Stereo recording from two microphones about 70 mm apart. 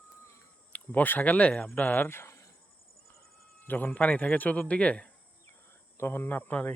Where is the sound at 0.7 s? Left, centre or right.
Left.